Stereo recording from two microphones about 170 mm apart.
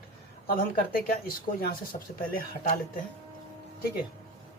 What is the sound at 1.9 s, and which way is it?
Speech, 40° left (ahead or behind).